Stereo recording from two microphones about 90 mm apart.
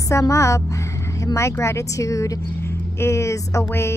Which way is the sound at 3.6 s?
30° left (ahead or behind).